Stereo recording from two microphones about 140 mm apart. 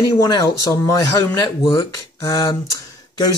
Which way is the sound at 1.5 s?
35° left (ahead or behind).